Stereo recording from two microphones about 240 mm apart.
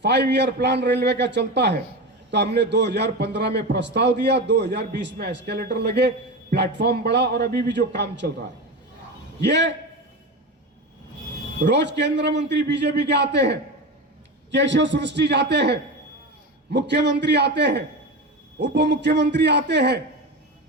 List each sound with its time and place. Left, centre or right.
0.0 s a man's voice: right
9.4 s a man's voice: right
11.6 s a man's voice: right